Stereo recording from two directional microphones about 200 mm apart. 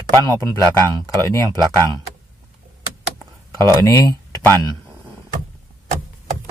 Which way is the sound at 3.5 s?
15° left (ahead or behind).